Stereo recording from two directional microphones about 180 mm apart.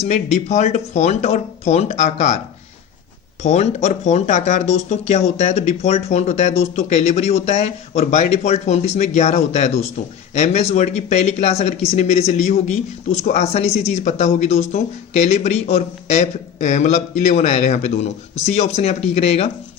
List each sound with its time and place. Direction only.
0.0 s speech: 40° left (ahead or behind)
3.4 s speech: 40° left (ahead or behind)